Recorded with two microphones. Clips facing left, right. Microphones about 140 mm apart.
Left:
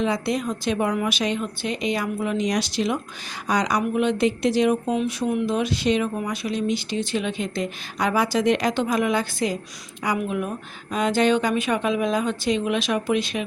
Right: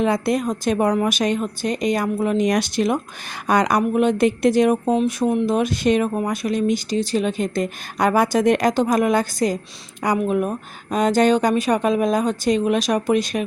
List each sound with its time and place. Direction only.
0.0 s speech: 50° right (ahead or behind)